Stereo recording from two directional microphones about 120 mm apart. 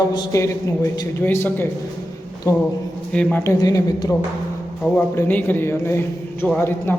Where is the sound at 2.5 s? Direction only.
30° left (ahead or behind).